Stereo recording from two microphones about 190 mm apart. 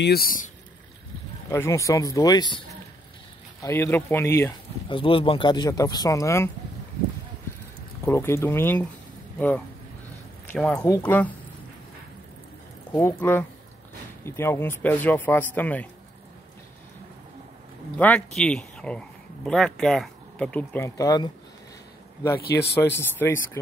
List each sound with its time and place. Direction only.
0.0 s speech: 55° left (ahead or behind)
1.5 s speech: 15° left (ahead or behind)
3.6 s speech: 10° left (ahead or behind)
4.8 s speech: 25° left (ahead or behind)
8.0 s speech: 15° left (ahead or behind)
10.5 s speech: 5° left (ahead or behind)
12.9 s speech: 10° left (ahead or behind)
17.9 s speech: 10° left (ahead or behind)
22.5 s speech: 15° left (ahead or behind)